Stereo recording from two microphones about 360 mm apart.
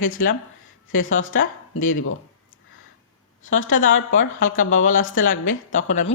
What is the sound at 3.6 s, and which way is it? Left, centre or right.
A woman's voice, left.